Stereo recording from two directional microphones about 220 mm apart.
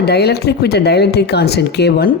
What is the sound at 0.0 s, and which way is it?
Speech, 45° left (ahead or behind).